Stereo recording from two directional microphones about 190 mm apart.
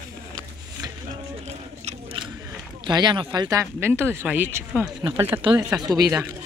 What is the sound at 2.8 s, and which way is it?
Speech, 25° right (ahead or behind).